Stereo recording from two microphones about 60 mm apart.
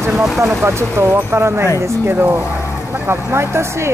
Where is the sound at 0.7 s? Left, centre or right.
Right.